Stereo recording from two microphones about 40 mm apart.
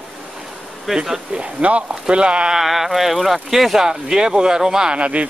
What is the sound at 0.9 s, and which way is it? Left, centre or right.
Speech, centre.